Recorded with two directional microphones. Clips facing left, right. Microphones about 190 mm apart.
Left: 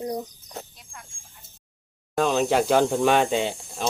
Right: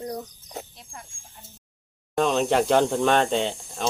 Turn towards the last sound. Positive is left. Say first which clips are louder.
# even
turn(degrees=5)  # may be behind; listen again after turning